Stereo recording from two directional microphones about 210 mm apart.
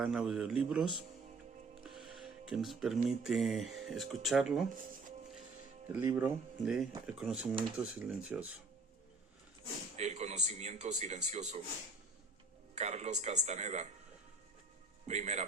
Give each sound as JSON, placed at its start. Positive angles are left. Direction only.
{"t": 0.0, "sound": "speech", "side_deg": 0}
{"t": 5.9, "sound": "speech", "side_deg": -10}
{"t": 10.0, "sound": "a man's voice", "side_deg": -30}
{"t": 12.7, "sound": "a man's voice", "side_deg": -30}
{"t": 15.0, "sound": "a man's voice", "side_deg": -30}